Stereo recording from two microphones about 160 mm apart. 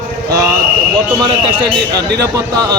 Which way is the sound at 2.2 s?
20° right (ahead or behind).